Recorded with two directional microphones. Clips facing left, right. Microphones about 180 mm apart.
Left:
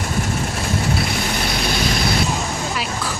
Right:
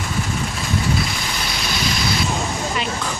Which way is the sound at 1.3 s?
50° left (ahead or behind).